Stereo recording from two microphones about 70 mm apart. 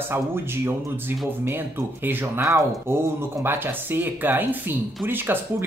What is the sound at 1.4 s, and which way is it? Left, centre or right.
Speech, right.